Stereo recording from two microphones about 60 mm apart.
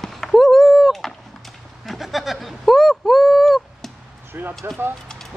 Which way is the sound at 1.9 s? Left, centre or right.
Centre.